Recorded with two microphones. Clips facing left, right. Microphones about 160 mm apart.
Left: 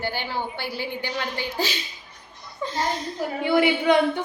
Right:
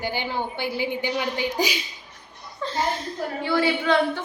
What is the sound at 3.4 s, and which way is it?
Speech, 20° left (ahead or behind).